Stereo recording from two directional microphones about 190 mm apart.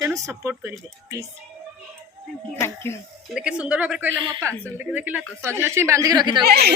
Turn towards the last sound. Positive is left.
turn(degrees=-60)  # may be behind; listen again after turning